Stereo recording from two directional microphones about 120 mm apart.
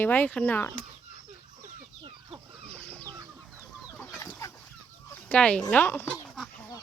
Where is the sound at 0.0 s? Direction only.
15° left (ahead or behind).